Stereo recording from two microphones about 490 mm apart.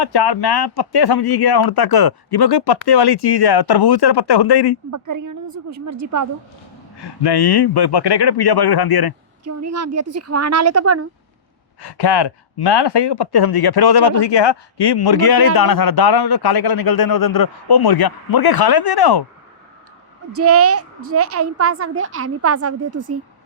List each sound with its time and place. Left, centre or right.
0.0 s speech: left
4.9 s a woman's voice: right
7.0 s speech: left
9.4 s a woman's voice: right
11.8 s speech: left
20.3 s a woman's voice: right